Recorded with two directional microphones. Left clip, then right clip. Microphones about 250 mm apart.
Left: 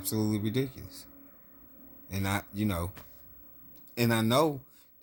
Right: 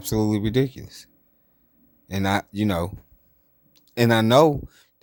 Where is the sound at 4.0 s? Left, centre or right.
Right.